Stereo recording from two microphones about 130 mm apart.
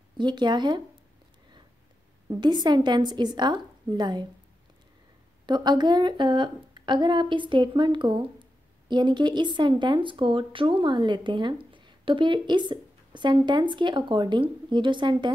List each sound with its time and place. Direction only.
0.2 s a woman's voice: 35° right (ahead or behind)
2.2 s a woman's voice: 35° right (ahead or behind)
5.5 s a woman's voice: 35° right (ahead or behind)